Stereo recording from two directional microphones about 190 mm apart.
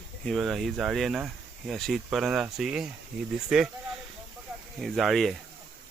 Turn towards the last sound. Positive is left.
turn(degrees=0)  # may be behind; listen again after turning